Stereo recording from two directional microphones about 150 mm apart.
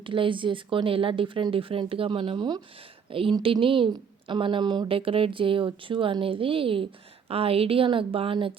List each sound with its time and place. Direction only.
0.0 s a woman's voice: 35° right (ahead or behind)